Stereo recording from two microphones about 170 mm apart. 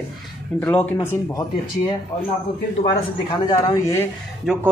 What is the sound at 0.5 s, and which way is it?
Speech, 10° left (ahead or behind).